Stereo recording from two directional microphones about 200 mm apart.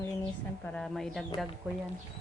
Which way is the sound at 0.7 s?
5° left (ahead or behind).